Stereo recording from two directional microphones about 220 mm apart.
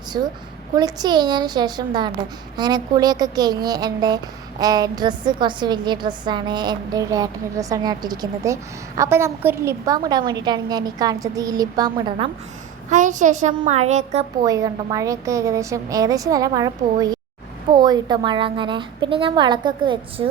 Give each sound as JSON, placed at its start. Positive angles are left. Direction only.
{"t": 0.1, "sound": "a woman's voice", "side_deg": -20}
{"t": 12.9, "sound": "a child's voice", "side_deg": -35}
{"t": 14.4, "sound": "a woman's voice", "side_deg": -15}